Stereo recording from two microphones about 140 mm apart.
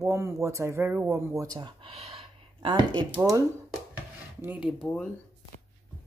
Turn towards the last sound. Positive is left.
turn(degrees=5)  # may be behind; listen again after turning